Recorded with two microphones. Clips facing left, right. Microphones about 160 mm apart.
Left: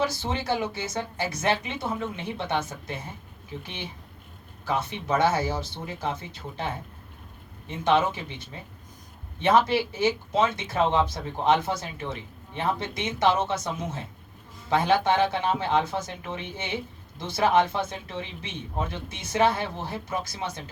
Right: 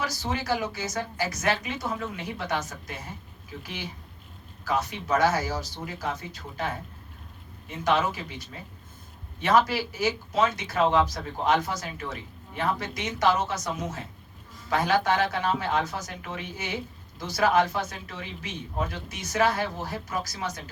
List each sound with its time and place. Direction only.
0.0 s speech: 25° left (ahead or behind)